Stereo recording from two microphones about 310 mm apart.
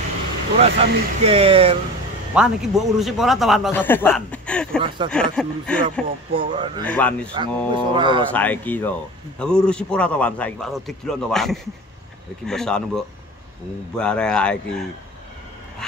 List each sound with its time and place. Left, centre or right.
0.6 s speech: centre
2.3 s speech: centre
4.7 s speech: centre
5.1 s speech: centre
6.3 s speech: centre
6.9 s speech: centre
7.3 s speech: centre
8.3 s speech: centre